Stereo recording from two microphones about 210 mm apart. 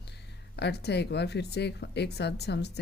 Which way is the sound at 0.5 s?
50° left (ahead or behind).